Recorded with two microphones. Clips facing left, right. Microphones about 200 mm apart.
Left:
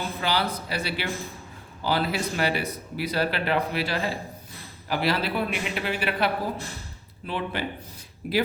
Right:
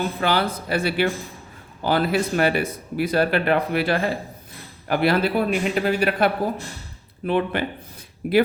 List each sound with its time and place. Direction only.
0.2 s speech: 55° right (ahead or behind)
7.3 s speech: 60° right (ahead or behind)